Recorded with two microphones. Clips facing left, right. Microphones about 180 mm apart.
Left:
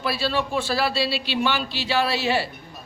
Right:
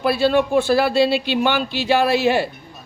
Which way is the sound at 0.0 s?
55° right (ahead or behind).